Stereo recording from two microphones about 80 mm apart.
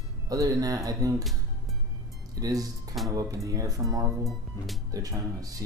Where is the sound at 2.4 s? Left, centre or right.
Right.